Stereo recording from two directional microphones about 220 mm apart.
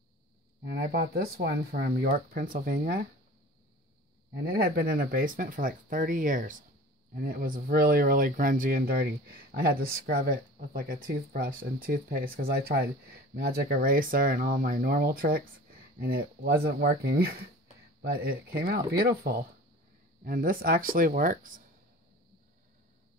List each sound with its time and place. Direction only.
0.7 s speech: 40° right (ahead or behind)
4.3 s speech: 45° right (ahead or behind)